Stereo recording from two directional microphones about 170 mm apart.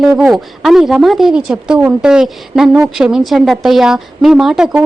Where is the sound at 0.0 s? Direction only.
Centre (ahead or behind).